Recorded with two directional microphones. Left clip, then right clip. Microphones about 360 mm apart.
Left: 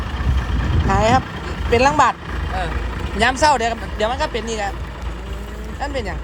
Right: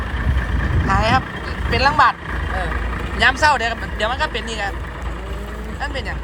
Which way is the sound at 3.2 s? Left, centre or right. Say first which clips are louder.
Even; centre.